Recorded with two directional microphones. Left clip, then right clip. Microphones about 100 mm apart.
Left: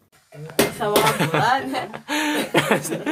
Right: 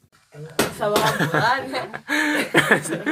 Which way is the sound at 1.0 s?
10° right (ahead or behind).